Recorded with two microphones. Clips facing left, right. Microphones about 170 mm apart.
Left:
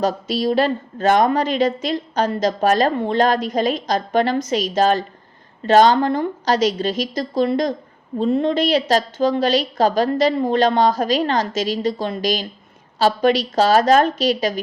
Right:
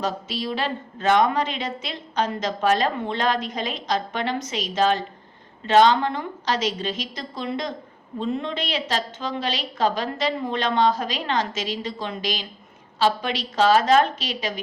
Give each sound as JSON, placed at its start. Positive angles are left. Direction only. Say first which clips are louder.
{"t": 0.0, "sound": "a woman's voice", "louder": "left 8 dB", "side_deg": 40}